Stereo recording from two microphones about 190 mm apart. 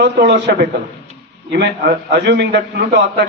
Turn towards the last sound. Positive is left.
turn(degrees=-60)  # may be behind; listen again after turning